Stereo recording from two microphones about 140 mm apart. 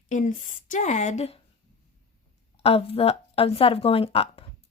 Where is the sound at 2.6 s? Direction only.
45° left (ahead or behind).